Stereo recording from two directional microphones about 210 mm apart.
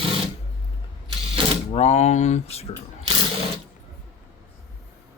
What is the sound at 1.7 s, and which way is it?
Speech, 30° left (ahead or behind).